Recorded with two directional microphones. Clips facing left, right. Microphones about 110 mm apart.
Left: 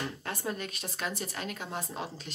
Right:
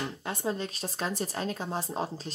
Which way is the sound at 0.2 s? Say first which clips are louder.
Right 4 dB; 20° right (ahead or behind).